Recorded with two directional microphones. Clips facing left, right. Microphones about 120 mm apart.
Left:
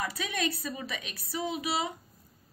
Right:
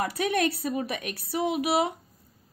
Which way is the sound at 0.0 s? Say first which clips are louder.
Right 7 dB; 55° right (ahead or behind).